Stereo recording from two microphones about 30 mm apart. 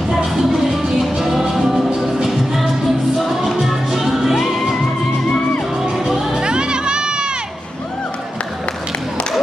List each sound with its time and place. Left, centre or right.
0.1 s music: centre
3.2 s music: centre
4.4 s music: centre
5.9 s music: centre
6.4 s music: right